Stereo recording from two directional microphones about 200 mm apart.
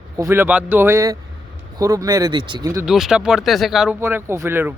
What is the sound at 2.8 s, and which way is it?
Speech, centre (ahead or behind).